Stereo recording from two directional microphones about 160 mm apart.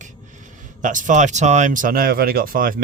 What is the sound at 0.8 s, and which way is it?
Speech, 55° right (ahead or behind).